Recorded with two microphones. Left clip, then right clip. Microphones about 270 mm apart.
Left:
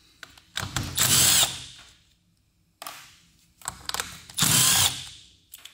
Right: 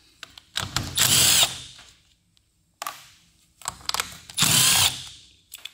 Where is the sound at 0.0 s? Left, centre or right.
Centre.